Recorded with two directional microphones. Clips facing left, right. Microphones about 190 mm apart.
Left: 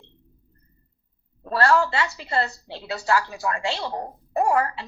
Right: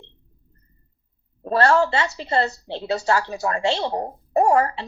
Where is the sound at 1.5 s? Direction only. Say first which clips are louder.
Right 3 dB; 25° right (ahead or behind).